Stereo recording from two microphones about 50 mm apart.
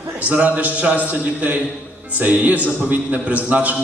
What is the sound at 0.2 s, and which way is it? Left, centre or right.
A man's voice, right.